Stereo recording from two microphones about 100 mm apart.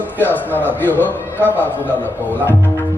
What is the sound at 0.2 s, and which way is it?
A man's voice, 20° left (ahead or behind).